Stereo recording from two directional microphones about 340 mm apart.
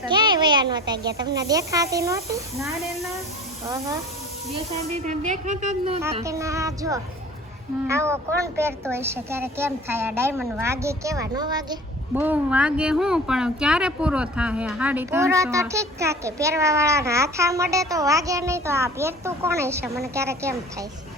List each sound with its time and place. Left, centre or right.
0.0 s a child's voice: centre
5.0 s a woman's voice: right
6.0 s speech: centre